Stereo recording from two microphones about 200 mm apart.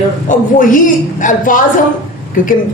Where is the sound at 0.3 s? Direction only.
40° left (ahead or behind).